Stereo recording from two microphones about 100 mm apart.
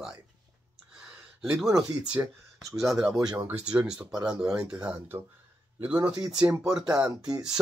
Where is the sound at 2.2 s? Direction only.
25° right (ahead or behind).